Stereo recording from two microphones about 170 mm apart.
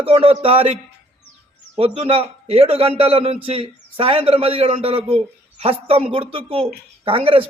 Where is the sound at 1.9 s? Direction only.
35° right (ahead or behind).